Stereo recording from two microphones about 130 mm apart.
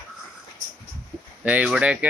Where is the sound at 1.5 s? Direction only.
10° right (ahead or behind).